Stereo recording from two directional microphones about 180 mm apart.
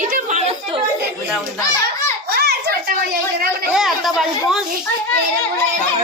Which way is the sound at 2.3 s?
60° right (ahead or behind).